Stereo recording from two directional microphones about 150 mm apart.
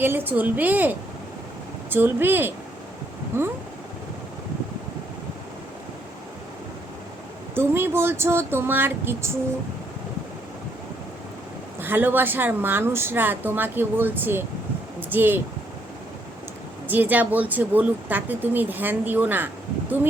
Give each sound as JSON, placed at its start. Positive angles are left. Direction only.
{"t": 0.0, "sound": "a woman's voice", "side_deg": -15}
{"t": 7.5, "sound": "a woman's voice", "side_deg": -15}
{"t": 11.8, "sound": "a woman's voice", "side_deg": -15}
{"t": 16.9, "sound": "a woman's voice", "side_deg": -10}